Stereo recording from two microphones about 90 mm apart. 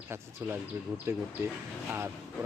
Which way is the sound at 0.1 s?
25° right (ahead or behind).